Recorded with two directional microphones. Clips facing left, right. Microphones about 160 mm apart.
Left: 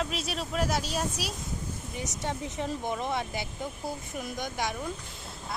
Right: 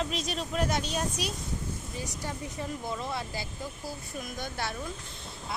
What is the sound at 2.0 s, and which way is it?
Speech, 20° left (ahead or behind).